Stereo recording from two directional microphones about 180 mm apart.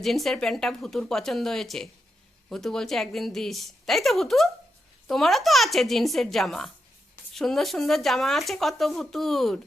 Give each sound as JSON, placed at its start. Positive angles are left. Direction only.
{"t": 0.0, "sound": "speech", "side_deg": 0}